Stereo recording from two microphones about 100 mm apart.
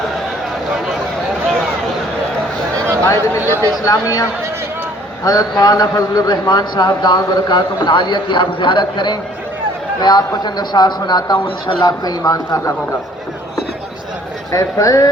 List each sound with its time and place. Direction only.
3.0 s a man's voice: 25° left (ahead or behind)
3.8 s a man's voice: 35° left (ahead or behind)
11.4 s a man's voice: 60° left (ahead or behind)
11.9 s speech: 40° left (ahead or behind)
14.5 s speech: 35° left (ahead or behind)